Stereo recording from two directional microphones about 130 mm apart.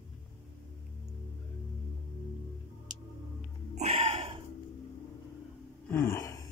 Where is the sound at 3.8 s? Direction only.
55° right (ahead or behind).